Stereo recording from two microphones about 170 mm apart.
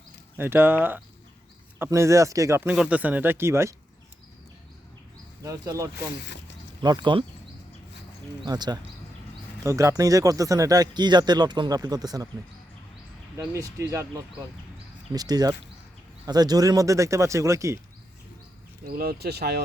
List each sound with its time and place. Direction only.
0.3 s speech: 10° right (ahead or behind)
5.4 s speech: 20° right (ahead or behind)
6.2 s speech: 90° left
6.8 s speech: 25° right (ahead or behind)
8.4 s speech: 25° right (ahead or behind)
13.3 s speech: 20° right (ahead or behind)
15.1 s speech: 20° right (ahead or behind)
18.9 s speech: 65° right (ahead or behind)